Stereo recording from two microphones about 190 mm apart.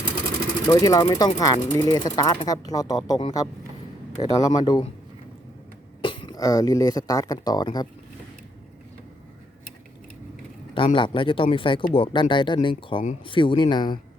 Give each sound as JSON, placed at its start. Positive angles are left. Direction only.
{"t": 0.6, "sound": "speech", "side_deg": 20}
{"t": 6.0, "sound": "speech", "side_deg": 25}
{"t": 10.8, "sound": "speech", "side_deg": 25}